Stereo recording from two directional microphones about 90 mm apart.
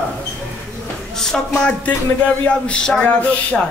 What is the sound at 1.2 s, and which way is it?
Speech, 10° left (ahead or behind).